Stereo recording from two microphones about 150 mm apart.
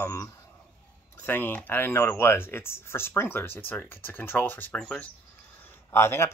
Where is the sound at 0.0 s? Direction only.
15° left (ahead or behind).